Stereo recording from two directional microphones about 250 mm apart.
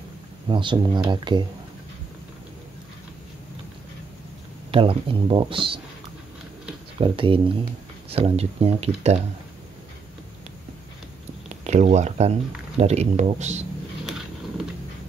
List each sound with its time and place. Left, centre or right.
0.5 s speech: centre
4.6 s speech: right
7.0 s speech: right
11.4 s speech: right